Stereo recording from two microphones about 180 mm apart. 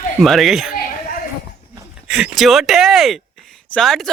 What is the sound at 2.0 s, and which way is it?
Speech, 5° right (ahead or behind).